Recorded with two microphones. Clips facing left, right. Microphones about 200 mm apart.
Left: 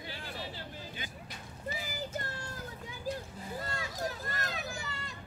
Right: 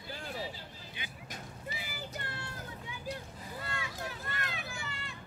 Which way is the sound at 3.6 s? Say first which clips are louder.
Left 3 dB; 40° left (ahead or behind).